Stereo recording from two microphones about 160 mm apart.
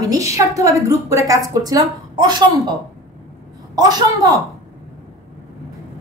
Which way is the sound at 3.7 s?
25° right (ahead or behind).